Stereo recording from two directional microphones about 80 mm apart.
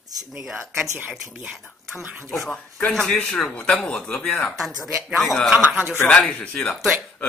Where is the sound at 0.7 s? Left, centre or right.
Right.